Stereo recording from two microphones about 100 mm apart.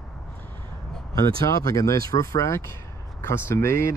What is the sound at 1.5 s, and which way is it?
Speech, 35° left (ahead or behind).